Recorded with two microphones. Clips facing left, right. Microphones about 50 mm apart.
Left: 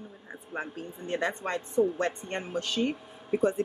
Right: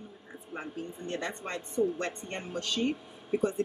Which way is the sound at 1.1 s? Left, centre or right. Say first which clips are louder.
Left 7 dB; centre.